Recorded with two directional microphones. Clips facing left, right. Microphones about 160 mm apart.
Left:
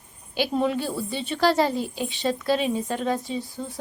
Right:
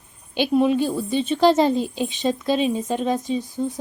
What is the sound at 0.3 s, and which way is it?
A woman's voice, 15° right (ahead or behind).